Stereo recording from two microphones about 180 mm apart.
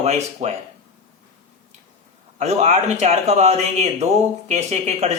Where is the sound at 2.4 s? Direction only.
40° right (ahead or behind).